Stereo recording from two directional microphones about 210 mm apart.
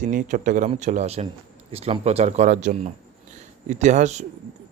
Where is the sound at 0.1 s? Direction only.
40° right (ahead or behind).